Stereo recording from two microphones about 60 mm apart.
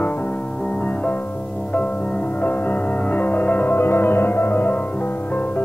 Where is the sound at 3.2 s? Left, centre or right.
Left.